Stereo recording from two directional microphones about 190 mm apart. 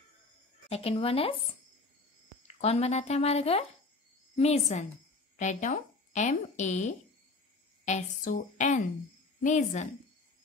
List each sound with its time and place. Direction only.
0.7 s speech: 30° left (ahead or behind)
2.4 s speech: 35° left (ahead or behind)